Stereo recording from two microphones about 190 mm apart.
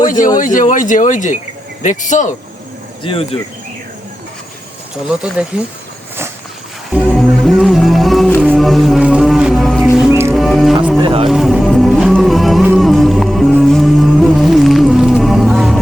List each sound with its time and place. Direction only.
0.3 s speech: 45° left (ahead or behind)
3.0 s speech: 30° left (ahead or behind)
6.9 s music: 5° right (ahead or behind)
10.9 s speech: 25° right (ahead or behind)
11.3 s music: centre (ahead or behind)